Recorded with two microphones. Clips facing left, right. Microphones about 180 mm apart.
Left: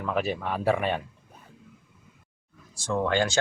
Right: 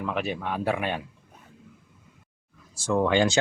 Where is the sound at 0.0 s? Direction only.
Centre (ahead or behind).